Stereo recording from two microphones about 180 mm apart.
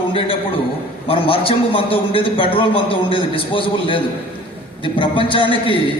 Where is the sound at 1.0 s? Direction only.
30° left (ahead or behind).